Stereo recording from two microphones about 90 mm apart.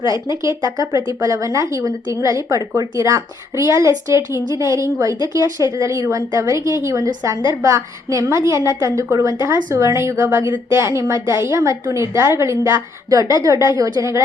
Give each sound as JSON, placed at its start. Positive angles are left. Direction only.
{"t": 0.0, "sound": "a woman's voice", "side_deg": -35}